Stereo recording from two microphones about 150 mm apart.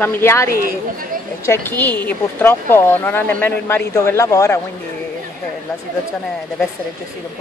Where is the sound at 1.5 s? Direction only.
10° left (ahead or behind).